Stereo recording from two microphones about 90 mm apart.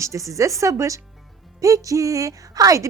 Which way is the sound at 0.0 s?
35° right (ahead or behind).